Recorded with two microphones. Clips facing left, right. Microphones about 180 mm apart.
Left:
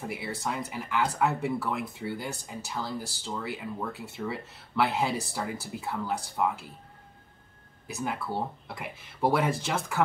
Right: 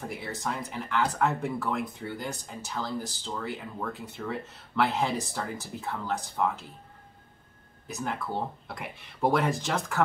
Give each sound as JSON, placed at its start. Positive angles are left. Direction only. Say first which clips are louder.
{"t": 0.0, "sound": "speech", "louder": "left 1 dB", "side_deg": 5}
{"t": 7.8, "sound": "speech", "louder": "even", "side_deg": 5}